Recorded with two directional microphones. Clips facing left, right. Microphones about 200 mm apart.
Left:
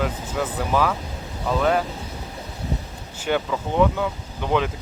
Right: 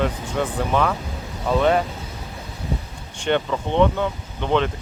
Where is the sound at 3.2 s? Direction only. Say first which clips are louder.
Right 2 dB; 5° left (ahead or behind).